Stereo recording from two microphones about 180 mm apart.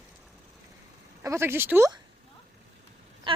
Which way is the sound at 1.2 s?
15° right (ahead or behind).